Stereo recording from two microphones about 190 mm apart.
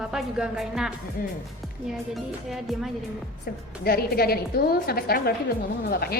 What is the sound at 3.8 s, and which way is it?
A woman's voice, 55° left (ahead or behind).